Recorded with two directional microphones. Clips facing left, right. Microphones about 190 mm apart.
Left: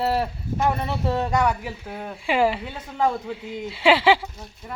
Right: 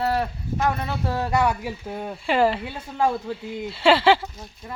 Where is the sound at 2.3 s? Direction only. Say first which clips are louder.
Right 1 dB; 10° left (ahead or behind).